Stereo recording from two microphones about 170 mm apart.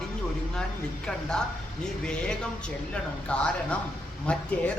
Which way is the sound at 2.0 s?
5° left (ahead or behind).